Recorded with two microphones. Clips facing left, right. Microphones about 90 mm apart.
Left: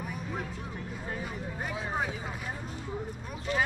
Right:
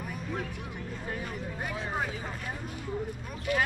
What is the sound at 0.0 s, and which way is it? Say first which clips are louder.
Music: right 1 dB; centre (ahead or behind).